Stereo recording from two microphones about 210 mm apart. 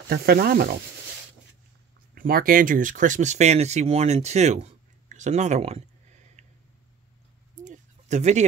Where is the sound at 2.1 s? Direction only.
45° right (ahead or behind).